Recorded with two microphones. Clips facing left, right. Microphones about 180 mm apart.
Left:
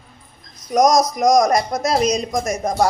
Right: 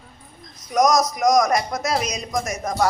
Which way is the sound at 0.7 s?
35° left (ahead or behind).